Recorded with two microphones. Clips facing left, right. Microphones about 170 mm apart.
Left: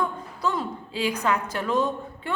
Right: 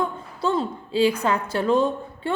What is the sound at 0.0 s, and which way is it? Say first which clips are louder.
A woman's voice: right 2 dB; 25° right (ahead or behind).